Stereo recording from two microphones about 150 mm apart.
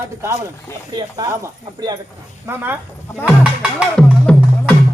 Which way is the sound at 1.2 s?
25° right (ahead or behind).